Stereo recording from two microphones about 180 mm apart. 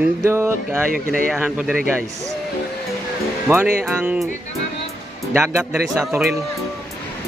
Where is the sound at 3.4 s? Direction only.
10° right (ahead or behind).